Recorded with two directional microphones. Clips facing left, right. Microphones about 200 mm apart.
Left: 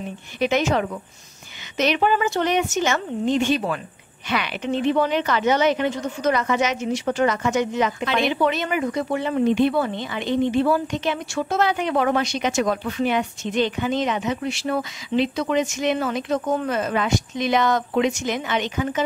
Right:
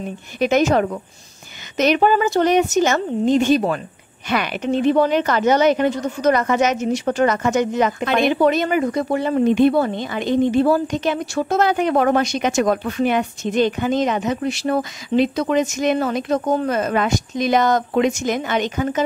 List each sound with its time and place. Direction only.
0.4 s a woman's voice: 45° right (ahead or behind)